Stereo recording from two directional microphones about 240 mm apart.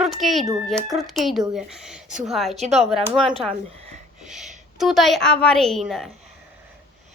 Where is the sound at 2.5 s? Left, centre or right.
Right.